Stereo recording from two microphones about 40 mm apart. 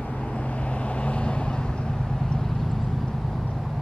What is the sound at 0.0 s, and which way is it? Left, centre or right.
Vehicle, left.